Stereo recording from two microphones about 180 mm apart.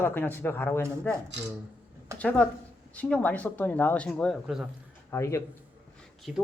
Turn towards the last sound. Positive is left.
turn(degrees=-5)  # may be behind; listen again after turning